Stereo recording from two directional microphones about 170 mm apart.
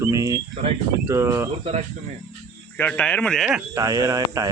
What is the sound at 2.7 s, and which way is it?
Speech, 10° left (ahead or behind).